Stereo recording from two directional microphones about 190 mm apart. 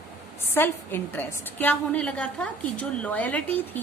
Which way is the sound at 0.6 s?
10° left (ahead or behind).